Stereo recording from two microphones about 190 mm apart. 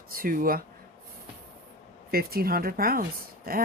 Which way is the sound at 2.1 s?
50° right (ahead or behind).